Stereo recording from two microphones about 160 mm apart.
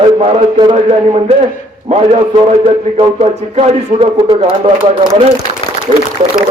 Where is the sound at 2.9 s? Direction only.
40° right (ahead or behind).